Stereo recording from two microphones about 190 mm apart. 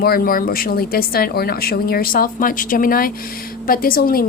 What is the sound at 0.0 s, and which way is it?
A woman's voice, 50° left (ahead or behind).